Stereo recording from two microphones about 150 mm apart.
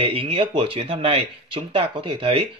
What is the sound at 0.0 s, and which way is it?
Speech, 40° right (ahead or behind).